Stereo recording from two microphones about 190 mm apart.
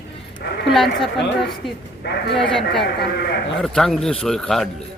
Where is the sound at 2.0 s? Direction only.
60° left (ahead or behind).